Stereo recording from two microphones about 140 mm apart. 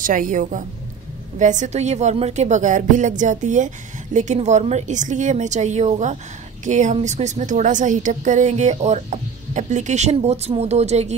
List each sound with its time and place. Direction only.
0.0 s a woman's voice: 75° right (ahead or behind); by 11.1 s 50° right (ahead or behind)